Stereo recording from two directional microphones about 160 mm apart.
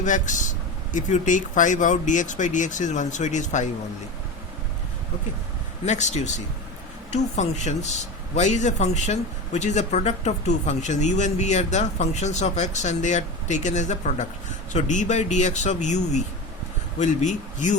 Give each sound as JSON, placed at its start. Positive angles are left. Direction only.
{"t": 0.0, "sound": "a man's voice", "side_deg": 50}
{"t": 5.8, "sound": "a man's voice", "side_deg": 45}